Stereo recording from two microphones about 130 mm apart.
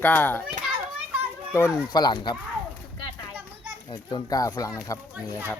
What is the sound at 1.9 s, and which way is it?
Speech, 35° left (ahead or behind).